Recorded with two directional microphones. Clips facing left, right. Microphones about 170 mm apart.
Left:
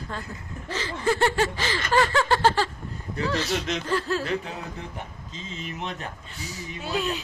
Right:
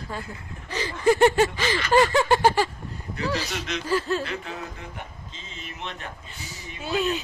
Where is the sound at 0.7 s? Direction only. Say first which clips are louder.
Right 4 dB; 15° right (ahead or behind).